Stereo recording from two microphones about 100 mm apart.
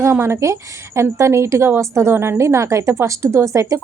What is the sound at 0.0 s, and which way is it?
A woman's voice, 25° right (ahead or behind).